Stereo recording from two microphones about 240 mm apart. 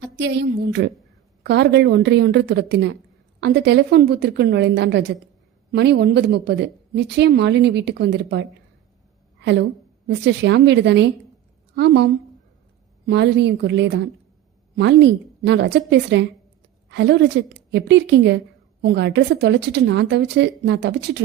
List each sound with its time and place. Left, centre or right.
0.0 s a woman's voice: right